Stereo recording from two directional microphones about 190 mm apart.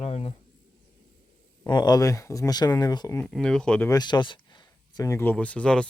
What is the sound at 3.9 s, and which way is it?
Speech, 20° left (ahead or behind).